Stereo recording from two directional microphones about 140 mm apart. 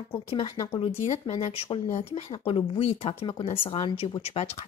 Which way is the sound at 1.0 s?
55° left (ahead or behind).